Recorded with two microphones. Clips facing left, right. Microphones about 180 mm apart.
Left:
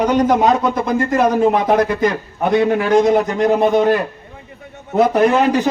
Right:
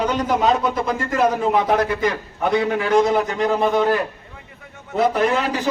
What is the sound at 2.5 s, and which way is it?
Speech, 55° left (ahead or behind).